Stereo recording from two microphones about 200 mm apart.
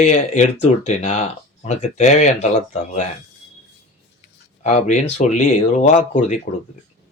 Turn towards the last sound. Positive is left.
turn(degrees=35)  # may be behind; listen again after turning